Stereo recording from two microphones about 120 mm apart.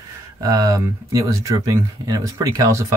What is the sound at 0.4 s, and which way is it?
Speech, 30° right (ahead or behind).